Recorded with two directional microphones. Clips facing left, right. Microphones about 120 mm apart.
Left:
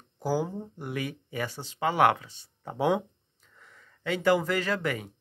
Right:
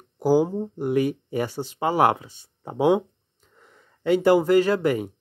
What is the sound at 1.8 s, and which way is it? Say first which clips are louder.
Speech: right 3 dB; 25° right (ahead or behind).